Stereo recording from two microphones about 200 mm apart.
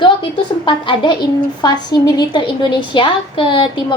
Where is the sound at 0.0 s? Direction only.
25° left (ahead or behind).